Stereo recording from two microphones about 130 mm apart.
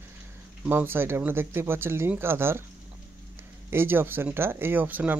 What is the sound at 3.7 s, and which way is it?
Speech, 15° right (ahead or behind).